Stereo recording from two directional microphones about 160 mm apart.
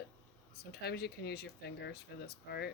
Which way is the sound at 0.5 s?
90° left.